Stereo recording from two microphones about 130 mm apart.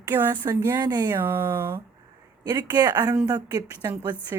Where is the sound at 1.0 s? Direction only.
20° right (ahead or behind).